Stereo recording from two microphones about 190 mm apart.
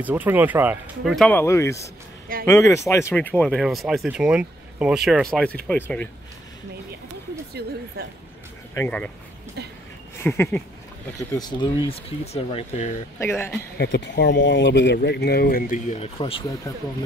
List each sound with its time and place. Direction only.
0.0 s speech: 10° right (ahead or behind)
1.1 s speech: 10° left (ahead or behind)
7.6 s a woman's voice: 60° right (ahead or behind)
8.7 s speech: 10° left (ahead or behind)
10.2 s speech: 10° left (ahead or behind); by 13.0 s 40° left (ahead or behind)
13.2 s speech: 10° left (ahead or behind)
13.7 s speech: 60° left (ahead or behind); by 16.7 s 30° left (ahead or behind)